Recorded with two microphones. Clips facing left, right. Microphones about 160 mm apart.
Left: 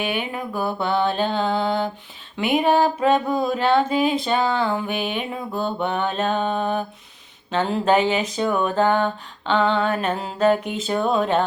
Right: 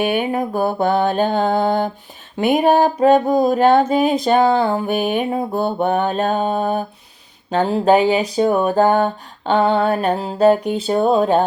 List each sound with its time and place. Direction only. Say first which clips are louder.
0.0 s mantra: right 7 dB; 45° right (ahead or behind)
2.3 s music: right 4 dB; 40° right (ahead or behind)